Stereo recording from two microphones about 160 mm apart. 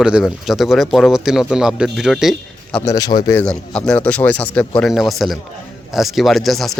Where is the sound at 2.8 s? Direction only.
20° left (ahead or behind).